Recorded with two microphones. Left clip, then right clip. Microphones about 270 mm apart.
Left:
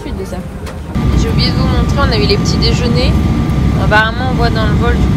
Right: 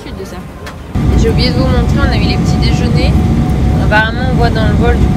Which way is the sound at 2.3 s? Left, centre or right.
Centre.